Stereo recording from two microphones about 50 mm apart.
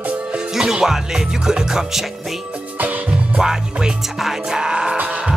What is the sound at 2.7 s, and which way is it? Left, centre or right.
Music, right.